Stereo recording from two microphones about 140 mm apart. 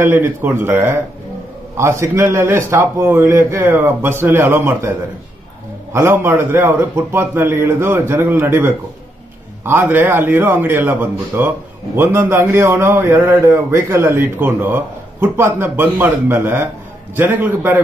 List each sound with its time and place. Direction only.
0.0 s a man's voice: 15° right (ahead or behind)
5.9 s a man's voice: 15° right (ahead or behind)